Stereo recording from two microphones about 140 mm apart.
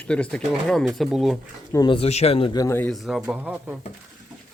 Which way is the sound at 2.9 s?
Centre (ahead or behind).